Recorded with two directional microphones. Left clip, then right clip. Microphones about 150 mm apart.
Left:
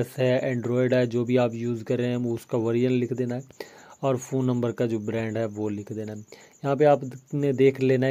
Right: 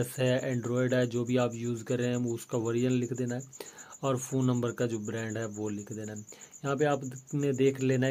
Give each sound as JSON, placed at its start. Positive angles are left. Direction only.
{"t": 0.0, "sound": "speech", "side_deg": 25}